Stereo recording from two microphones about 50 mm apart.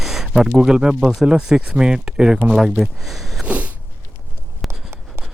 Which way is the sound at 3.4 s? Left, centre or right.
Right.